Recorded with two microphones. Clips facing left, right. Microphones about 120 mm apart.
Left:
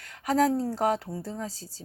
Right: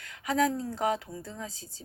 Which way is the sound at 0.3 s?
35° left (ahead or behind).